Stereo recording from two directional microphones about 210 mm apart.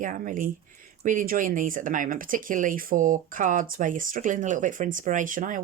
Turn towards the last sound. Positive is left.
turn(degrees=-40)  # may be behind; listen again after turning